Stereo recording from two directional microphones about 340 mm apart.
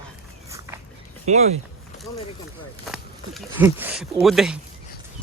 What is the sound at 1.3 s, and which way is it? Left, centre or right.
Speech, centre.